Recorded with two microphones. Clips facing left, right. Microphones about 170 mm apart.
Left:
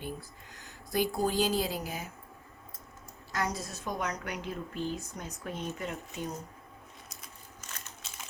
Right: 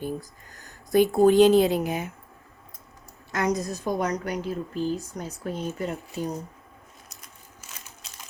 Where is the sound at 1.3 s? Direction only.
Centre (ahead or behind).